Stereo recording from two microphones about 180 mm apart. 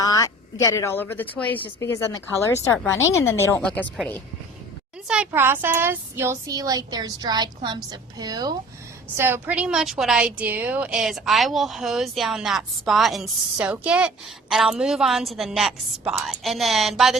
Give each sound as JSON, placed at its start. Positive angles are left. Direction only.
{"t": 0.0, "sound": "a sound", "side_deg": 20}
{"t": 0.6, "sound": "a woman's voice", "side_deg": 15}
{"t": 5.0, "sound": "speech", "side_deg": -5}
{"t": 9.1, "sound": "a woman's voice", "side_deg": -10}